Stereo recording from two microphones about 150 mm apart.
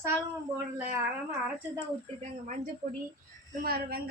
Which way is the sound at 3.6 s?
90° right.